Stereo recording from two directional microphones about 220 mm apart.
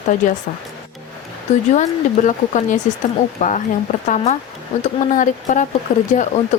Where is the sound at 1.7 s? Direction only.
30° left (ahead or behind).